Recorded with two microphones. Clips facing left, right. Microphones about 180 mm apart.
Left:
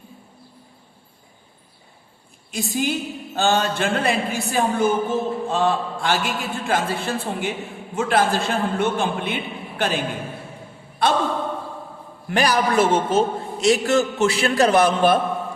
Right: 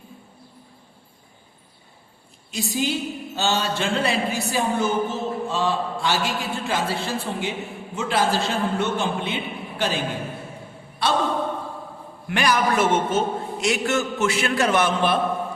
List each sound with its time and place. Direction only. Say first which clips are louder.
2.5 s a sound: left 1 dB; 55° left (ahead or behind)
11.0 s speech: left 3 dB; 50° left (ahead or behind)
12.3 s a man's voice: left 2 dB; 35° left (ahead or behind)